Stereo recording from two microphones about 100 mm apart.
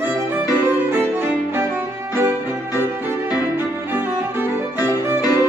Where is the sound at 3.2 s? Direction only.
40° left (ahead or behind).